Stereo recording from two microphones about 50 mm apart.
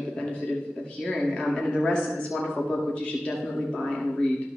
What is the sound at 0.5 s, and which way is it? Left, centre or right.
A man's voice, centre.